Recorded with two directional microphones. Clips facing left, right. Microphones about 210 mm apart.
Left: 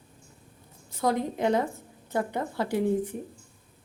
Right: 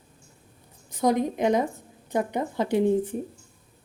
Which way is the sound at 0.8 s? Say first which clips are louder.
Right 4 dB; 15° right (ahead or behind).